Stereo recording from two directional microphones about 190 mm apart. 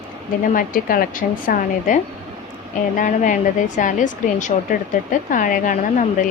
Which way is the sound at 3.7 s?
40° left (ahead or behind).